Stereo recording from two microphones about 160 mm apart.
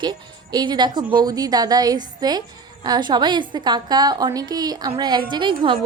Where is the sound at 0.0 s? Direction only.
30° right (ahead or behind).